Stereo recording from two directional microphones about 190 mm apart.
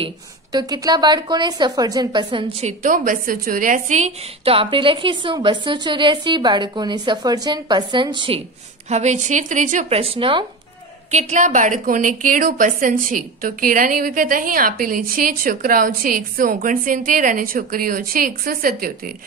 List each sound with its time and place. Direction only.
0.0 s a woman's voice: 20° right (ahead or behind)
2.6 s a woman's voice: 45° right (ahead or behind); by 8.4 s 25° right (ahead or behind)
8.8 s speech: 35° right (ahead or behind)
11.1 s a woman's voice: 35° right (ahead or behind)